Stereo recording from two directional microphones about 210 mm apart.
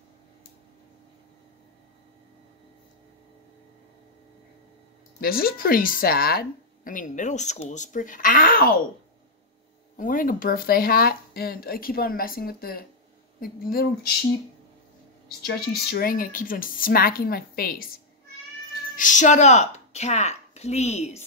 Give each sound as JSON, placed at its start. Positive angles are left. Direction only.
{"t": 5.2, "sound": "a woman's voice", "side_deg": 45}
{"t": 9.9, "sound": "speech", "side_deg": 40}
{"t": 15.4, "sound": "speech", "side_deg": 50}